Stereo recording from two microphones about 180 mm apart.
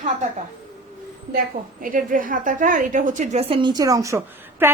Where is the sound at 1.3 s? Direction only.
50° right (ahead or behind); by 4.7 s 15° right (ahead or behind).